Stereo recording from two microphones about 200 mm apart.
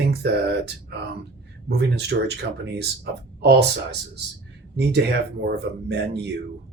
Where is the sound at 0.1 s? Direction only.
55° right (ahead or behind).